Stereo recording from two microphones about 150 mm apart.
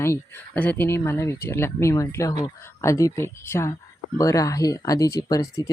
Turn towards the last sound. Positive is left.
turn(degrees=20)  # may be behind; listen again after turning